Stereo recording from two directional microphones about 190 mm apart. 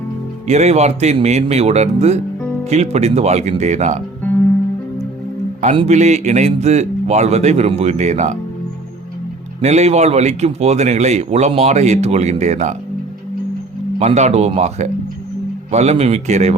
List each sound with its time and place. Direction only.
0.4 s speech: 35° right (ahead or behind)
5.6 s speech: 35° right (ahead or behind)
9.6 s speech: 35° right (ahead or behind)
14.0 s speech: 35° right (ahead or behind)